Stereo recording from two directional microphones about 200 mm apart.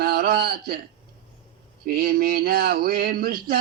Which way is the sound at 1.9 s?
50° right (ahead or behind).